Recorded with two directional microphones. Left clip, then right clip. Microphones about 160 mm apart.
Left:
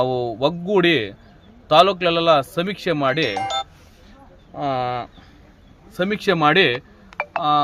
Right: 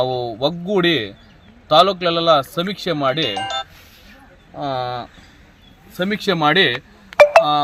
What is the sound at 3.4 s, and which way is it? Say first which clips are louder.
Telephone dialing: even; 10° left (ahead or behind).